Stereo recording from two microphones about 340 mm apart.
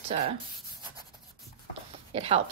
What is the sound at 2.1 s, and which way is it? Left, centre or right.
Speech, centre.